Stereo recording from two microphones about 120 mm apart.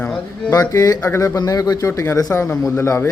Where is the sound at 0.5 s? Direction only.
30° left (ahead or behind).